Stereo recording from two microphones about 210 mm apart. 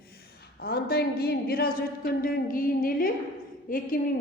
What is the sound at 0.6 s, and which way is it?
A woman's voice, 45° left (ahead or behind).